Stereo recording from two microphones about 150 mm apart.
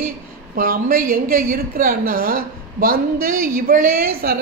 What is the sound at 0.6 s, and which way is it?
A woman's voice, 70° right (ahead or behind).